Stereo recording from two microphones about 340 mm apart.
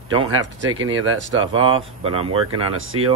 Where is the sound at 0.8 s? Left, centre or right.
Right.